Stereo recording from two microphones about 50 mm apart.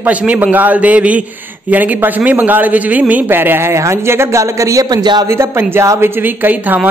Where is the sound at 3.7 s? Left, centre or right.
Right.